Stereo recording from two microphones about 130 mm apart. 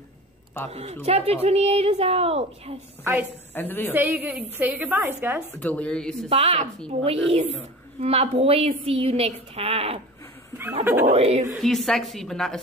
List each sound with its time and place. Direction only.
0.7 s a woman's voice: 50° right (ahead or behind)
3.0 s a woman's voice: 15° right (ahead or behind)
3.5 s a woman's voice: 15° left (ahead or behind)
3.9 s a woman's voice: 15° right (ahead or behind)
5.6 s a woman's voice: 10° left (ahead or behind)
6.2 s a woman's voice: 55° right (ahead or behind)
10.6 s a woman's voice: 15° right (ahead or behind)
11.1 s a woman's voice: 50° right (ahead or behind)
11.5 s a woman's voice: centre (ahead or behind)